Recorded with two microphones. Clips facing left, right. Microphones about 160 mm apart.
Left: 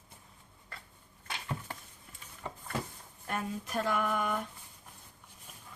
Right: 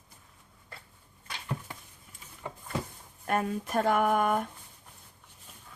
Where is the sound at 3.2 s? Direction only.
55° right (ahead or behind).